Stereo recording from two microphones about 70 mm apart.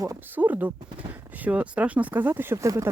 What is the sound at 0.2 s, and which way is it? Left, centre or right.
Speech, right.